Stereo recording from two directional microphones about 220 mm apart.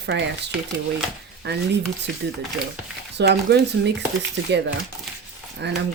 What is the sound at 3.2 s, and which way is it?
Speech, 50° right (ahead or behind).